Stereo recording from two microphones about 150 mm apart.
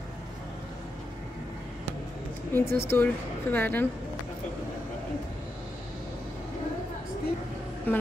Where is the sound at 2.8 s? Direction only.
15° left (ahead or behind).